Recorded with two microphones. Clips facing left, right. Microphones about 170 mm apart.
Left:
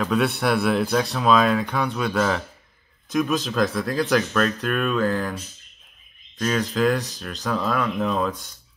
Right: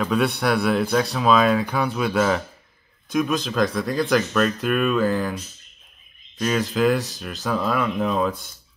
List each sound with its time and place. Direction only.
0.0 s speech: centre (ahead or behind)